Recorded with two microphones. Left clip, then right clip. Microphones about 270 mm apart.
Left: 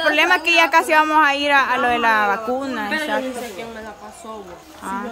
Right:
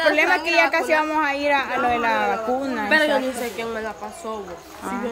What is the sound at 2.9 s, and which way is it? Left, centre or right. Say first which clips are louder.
Speech: right 6 dB; centre.